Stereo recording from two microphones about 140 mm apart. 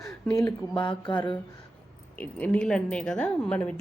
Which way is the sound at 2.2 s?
10° left (ahead or behind).